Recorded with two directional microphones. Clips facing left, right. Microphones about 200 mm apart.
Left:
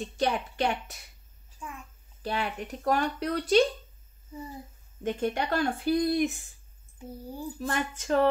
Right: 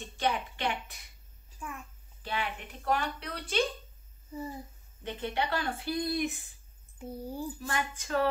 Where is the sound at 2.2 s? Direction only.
45° left (ahead or behind).